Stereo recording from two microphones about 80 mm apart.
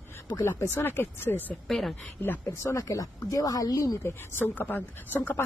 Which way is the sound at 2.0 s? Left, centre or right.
Left.